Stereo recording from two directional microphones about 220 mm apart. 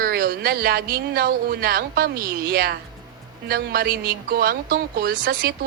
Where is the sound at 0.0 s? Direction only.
45° right (ahead or behind).